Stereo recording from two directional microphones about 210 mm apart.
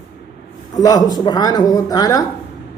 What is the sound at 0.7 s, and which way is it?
Speech, 20° left (ahead or behind).